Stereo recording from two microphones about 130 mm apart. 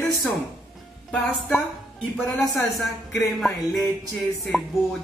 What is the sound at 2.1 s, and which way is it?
Music, centre (ahead or behind).